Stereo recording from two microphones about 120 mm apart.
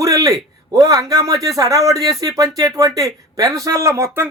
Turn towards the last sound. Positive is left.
turn(degrees=-25)  # may be behind; listen again after turning